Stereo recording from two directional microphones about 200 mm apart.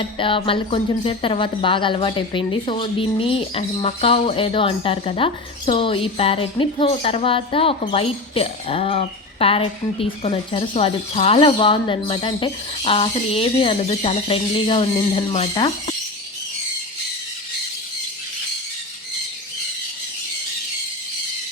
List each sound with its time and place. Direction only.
0.2 s a woman's voice: 25° left (ahead or behind)